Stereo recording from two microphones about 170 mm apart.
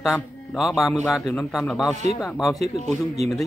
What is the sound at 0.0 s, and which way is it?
Speech, centre (ahead or behind).